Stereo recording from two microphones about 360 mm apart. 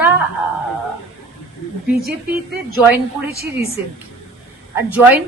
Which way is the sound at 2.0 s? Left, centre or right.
Centre.